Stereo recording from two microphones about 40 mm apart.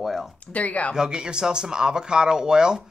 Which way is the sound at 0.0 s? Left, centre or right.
Centre.